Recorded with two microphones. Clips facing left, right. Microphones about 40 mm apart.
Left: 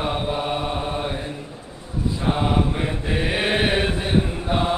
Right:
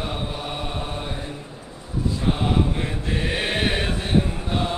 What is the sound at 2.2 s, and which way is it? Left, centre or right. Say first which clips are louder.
Mantra: left 2 dB; centre.